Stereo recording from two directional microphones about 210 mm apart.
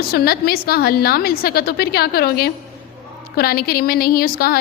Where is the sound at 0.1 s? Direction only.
45° left (ahead or behind).